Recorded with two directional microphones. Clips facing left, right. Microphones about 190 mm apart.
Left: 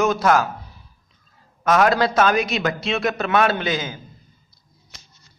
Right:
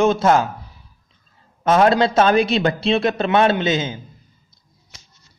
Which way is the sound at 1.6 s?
25° right (ahead or behind).